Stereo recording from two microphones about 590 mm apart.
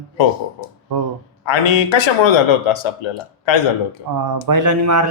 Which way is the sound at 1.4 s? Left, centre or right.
Left.